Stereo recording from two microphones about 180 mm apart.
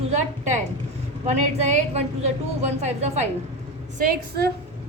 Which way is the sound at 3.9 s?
55° right (ahead or behind).